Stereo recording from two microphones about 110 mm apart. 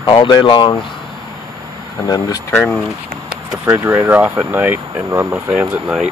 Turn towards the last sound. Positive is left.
turn(degrees=-15)  # may be behind; listen again after turning